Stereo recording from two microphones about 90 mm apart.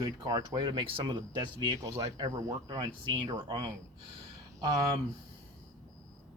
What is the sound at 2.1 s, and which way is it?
Speech, 50° right (ahead or behind).